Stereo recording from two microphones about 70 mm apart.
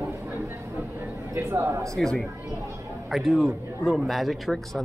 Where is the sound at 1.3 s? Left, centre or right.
Right.